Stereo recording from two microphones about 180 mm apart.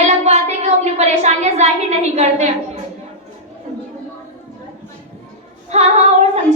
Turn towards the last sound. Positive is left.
turn(degrees=-35)  # may be behind; listen again after turning